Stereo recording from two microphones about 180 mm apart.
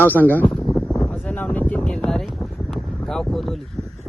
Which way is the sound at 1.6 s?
10° left (ahead or behind).